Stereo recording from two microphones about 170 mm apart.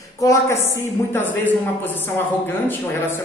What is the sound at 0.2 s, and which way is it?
A woman's voice, 15° left (ahead or behind).